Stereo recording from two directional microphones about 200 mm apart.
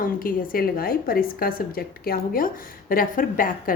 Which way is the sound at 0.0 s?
45° left (ahead or behind).